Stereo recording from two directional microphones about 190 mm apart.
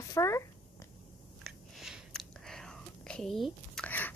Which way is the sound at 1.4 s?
Centre (ahead or behind).